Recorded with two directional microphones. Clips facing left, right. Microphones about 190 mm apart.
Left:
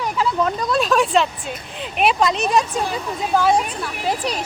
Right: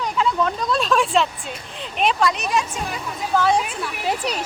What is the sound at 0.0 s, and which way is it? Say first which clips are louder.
Speech: left 1 dB; 5° left (ahead or behind).